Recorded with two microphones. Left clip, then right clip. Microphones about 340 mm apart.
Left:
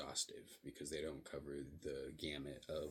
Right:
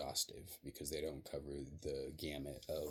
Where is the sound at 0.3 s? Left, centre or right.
Right.